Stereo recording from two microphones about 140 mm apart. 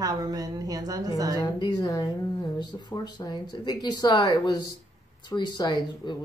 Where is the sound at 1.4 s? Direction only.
30° left (ahead or behind).